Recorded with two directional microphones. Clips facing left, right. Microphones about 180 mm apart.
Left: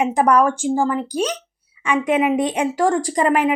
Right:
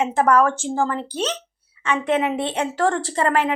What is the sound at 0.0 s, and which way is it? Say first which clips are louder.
A woman's voice: left 2 dB; 15° left (ahead or behind).